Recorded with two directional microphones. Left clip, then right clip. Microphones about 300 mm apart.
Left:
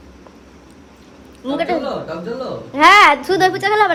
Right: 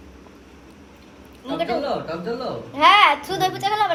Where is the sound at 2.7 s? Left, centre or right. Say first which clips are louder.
Left 5 dB; left.